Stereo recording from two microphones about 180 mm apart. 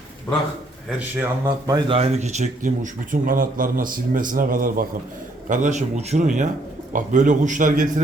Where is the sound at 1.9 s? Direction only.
35° right (ahead or behind).